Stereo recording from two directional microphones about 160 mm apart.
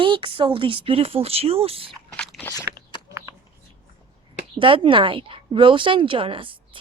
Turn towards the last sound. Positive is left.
turn(degrees=-30)  # may be behind; listen again after turning